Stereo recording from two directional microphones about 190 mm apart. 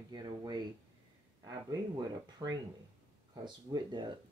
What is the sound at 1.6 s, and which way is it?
Speech, 20° right (ahead or behind).